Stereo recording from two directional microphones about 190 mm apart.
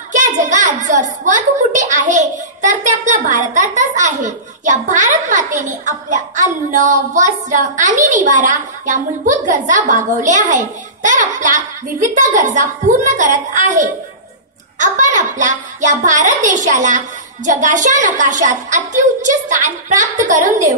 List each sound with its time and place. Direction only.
0.1 s a child's voice: 40° right (ahead or behind)